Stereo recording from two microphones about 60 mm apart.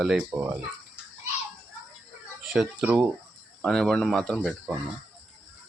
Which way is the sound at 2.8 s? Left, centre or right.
Right.